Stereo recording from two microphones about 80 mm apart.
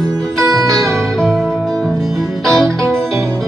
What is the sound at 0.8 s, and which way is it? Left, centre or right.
Music, centre.